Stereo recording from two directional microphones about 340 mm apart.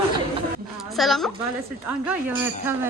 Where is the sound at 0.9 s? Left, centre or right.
Centre.